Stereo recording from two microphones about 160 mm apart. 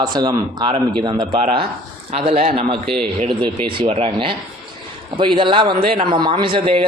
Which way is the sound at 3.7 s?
35° right (ahead or behind).